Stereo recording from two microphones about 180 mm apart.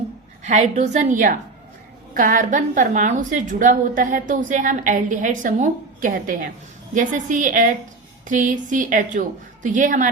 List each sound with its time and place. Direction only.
0.4 s a woman's voice: 40° right (ahead or behind)